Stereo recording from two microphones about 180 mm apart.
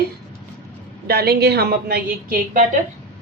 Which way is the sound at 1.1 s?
60° right (ahead or behind).